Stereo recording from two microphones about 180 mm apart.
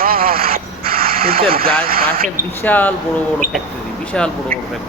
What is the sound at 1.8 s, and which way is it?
Speech, 55° right (ahead or behind).